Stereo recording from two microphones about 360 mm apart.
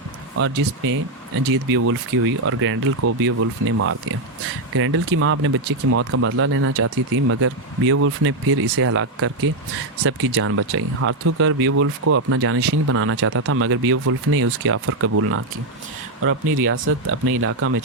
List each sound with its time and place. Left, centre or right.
0.3 s speech: right
4.7 s speech: right